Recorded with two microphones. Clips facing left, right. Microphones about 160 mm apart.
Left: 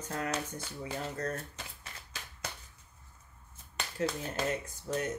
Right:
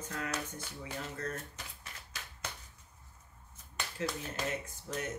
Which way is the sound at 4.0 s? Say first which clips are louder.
Left 4 dB; 40° left (ahead or behind).